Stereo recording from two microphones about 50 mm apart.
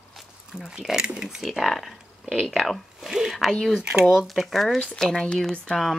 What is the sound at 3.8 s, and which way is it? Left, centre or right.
Speech, centre.